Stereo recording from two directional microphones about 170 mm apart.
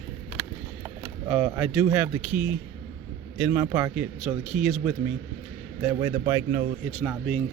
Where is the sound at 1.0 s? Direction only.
10° right (ahead or behind).